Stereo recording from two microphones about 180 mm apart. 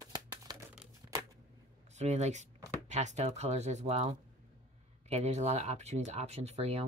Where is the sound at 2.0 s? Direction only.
40° right (ahead or behind).